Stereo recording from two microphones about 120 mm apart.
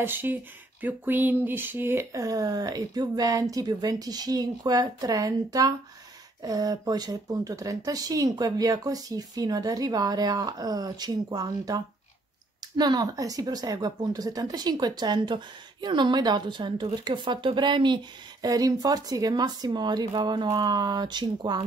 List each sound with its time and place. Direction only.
0.0 s speech: 15° right (ahead or behind); by 21.6 s 40° right (ahead or behind)